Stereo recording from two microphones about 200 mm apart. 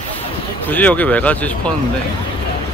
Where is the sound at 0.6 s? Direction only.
10° left (ahead or behind).